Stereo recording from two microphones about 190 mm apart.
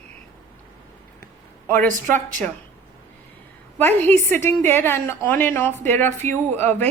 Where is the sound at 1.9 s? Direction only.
45° right (ahead or behind).